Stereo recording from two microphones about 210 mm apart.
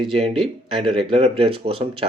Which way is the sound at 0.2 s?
25° right (ahead or behind).